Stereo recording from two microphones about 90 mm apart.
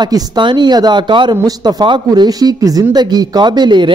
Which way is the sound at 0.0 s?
50° right (ahead or behind).